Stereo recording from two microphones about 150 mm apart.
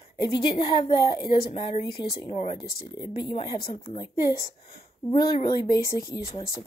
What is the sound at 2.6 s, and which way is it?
Speech, 90° left.